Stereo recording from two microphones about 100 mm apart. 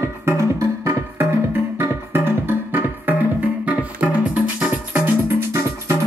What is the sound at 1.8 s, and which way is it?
Music, 25° right (ahead or behind).